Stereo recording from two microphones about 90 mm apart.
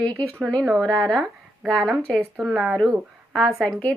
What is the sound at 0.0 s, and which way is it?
Speech, 15° left (ahead or behind).